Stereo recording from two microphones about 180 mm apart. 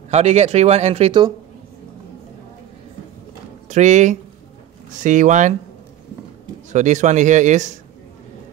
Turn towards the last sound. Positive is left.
turn(degrees=-40)  # may be behind; listen again after turning